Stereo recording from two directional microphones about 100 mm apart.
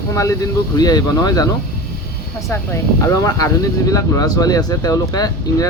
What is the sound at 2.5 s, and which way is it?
Speech, 30° left (ahead or behind).